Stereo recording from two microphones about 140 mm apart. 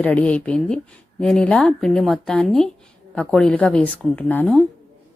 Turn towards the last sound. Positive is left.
turn(degrees=10)  # may be behind; listen again after turning